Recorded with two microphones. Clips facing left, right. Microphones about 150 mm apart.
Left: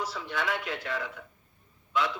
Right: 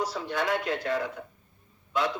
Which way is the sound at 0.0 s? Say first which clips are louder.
Right 4 dB; 40° right (ahead or behind).